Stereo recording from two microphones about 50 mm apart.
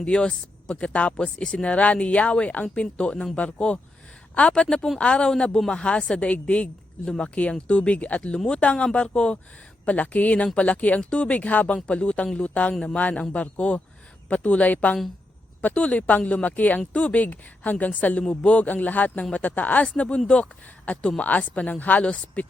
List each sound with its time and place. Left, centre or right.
0.0 s a woman's voice: centre